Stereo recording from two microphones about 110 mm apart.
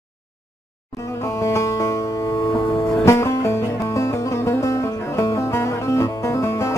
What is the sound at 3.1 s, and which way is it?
Music, 25° left (ahead or behind).